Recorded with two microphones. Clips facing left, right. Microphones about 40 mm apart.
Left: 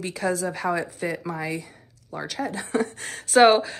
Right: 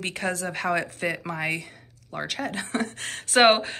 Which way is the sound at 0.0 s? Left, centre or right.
Right.